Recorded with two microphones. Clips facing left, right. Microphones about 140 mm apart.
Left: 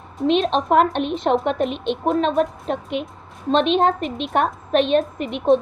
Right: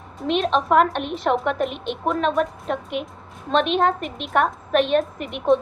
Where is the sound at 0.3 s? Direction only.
25° left (ahead or behind).